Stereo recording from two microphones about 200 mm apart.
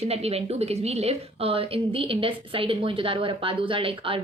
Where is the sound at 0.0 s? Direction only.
30° right (ahead or behind).